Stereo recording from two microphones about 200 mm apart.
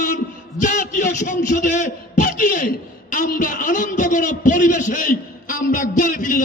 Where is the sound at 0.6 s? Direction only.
40° left (ahead or behind).